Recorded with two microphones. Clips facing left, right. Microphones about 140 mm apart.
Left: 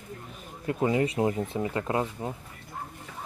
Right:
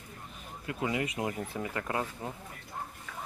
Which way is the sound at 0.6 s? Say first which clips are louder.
Left 7 dB; 30° left (ahead or behind).